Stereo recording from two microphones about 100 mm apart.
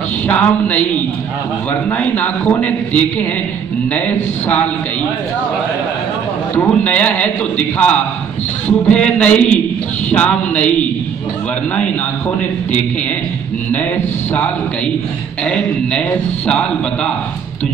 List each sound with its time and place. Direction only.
0.3 s a man's voice: 15° left (ahead or behind)
6.5 s a man's voice: 15° left (ahead or behind)
13.7 s a man's voice: 20° left (ahead or behind)
15.4 s a man's voice: 10° left (ahead or behind)